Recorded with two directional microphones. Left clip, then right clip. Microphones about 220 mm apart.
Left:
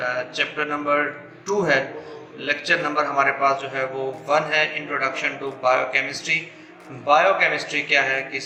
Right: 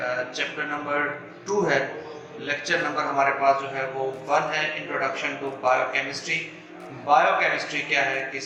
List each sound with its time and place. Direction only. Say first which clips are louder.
0.0 s a man's voice: left 3 dB; 35° left (ahead or behind)